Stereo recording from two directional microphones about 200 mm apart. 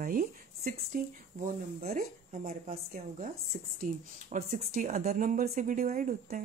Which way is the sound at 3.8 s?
40° right (ahead or behind).